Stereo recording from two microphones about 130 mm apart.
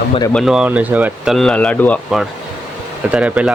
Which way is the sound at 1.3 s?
5° left (ahead or behind).